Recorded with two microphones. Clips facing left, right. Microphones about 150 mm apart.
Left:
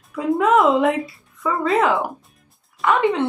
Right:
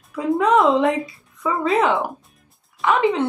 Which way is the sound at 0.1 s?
Centre (ahead or behind).